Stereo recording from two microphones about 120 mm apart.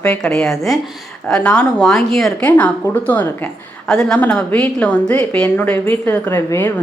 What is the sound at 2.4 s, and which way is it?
A woman's voice, 15° left (ahead or behind).